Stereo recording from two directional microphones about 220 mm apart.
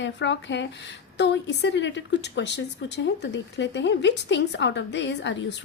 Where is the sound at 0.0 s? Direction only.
55° left (ahead or behind).